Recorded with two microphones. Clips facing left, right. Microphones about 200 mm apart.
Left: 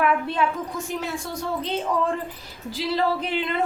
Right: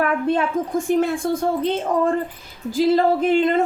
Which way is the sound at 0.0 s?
45° right (ahead or behind).